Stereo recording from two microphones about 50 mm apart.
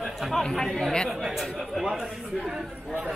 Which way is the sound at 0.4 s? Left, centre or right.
Centre.